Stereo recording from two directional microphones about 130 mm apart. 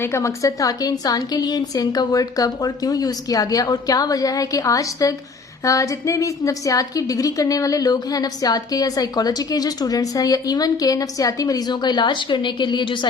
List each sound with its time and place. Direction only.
0.0 s a woman's voice: 20° left (ahead or behind); by 13.1 s 40° left (ahead or behind)